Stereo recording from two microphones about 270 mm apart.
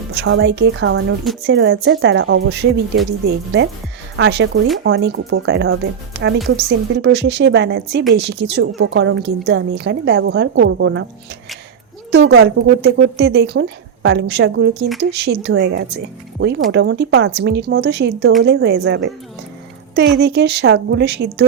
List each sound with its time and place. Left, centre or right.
0.2 s a woman's voice: right
12.1 s a woman's voice: right
20.1 s a woman's voice: right